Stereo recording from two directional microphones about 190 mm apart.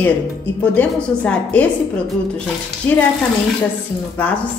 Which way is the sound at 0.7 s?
5° left (ahead or behind).